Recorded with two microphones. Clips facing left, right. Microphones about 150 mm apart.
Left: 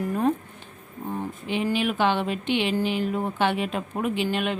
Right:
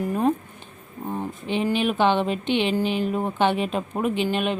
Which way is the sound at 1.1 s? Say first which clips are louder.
Right 2 dB; 25° right (ahead or behind).